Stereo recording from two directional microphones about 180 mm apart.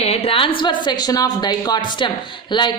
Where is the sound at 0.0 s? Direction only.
35° left (ahead or behind).